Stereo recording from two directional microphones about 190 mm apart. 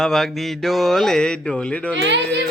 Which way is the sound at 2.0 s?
65° right (ahead or behind).